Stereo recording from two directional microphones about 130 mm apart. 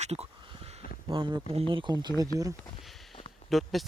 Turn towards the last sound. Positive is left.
turn(degrees=0)  # may be behind; listen again after turning